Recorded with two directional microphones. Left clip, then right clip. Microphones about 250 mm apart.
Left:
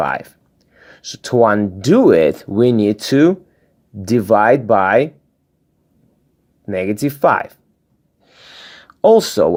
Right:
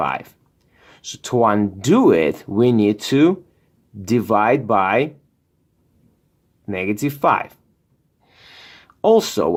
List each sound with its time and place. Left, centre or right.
0.0 s speech: centre
6.7 s speech: centre
8.2 s a sound: centre